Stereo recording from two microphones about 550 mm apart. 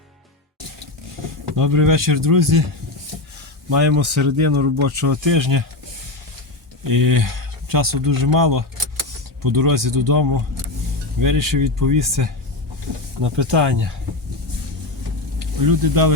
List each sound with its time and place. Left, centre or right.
1.5 s speech: right
3.7 s speech: right
6.8 s speech: right
15.6 s speech: right